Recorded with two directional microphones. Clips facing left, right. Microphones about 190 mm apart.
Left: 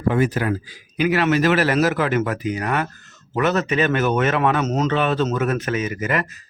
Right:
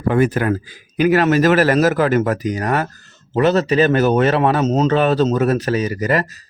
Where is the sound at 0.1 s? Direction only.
55° right (ahead or behind).